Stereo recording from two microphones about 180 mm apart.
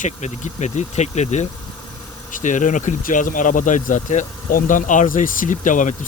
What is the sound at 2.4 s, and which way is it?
Speech, 45° left (ahead or behind).